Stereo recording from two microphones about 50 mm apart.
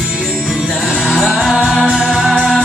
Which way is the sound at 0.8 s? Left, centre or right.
Centre.